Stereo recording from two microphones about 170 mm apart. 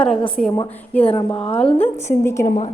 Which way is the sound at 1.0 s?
30° left (ahead or behind).